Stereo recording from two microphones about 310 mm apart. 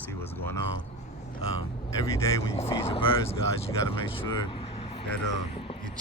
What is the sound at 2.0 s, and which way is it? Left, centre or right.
Speech, centre.